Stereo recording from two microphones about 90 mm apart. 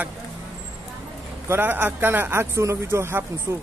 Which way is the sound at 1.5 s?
20° right (ahead or behind).